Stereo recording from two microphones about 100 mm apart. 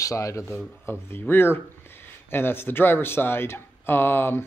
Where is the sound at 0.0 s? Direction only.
35° left (ahead or behind).